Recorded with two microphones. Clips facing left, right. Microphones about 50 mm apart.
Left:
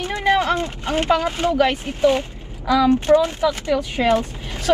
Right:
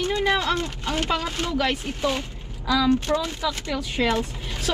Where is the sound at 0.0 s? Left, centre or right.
Left.